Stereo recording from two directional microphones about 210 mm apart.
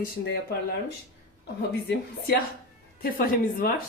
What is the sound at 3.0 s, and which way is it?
Speech, 45° left (ahead or behind).